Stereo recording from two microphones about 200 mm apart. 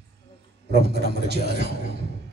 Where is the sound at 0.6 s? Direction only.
55° right (ahead or behind).